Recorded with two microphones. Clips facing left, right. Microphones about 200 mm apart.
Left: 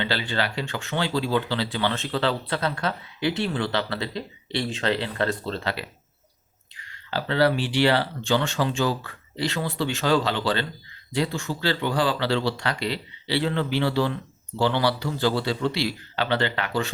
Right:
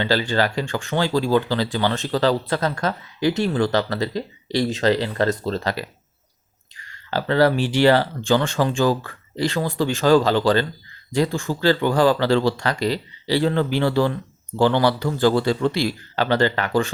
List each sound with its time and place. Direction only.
0.0 s speech: 45° right (ahead or behind)